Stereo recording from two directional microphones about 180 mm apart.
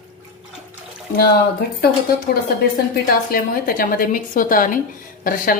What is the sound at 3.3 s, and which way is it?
Speech, 55° left (ahead or behind).